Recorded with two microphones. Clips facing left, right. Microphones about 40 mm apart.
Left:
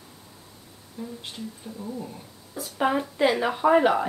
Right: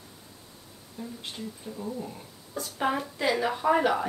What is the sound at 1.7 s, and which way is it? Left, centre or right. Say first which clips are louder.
Speech: even; left.